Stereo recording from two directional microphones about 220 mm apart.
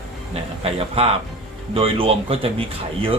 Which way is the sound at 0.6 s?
25° right (ahead or behind).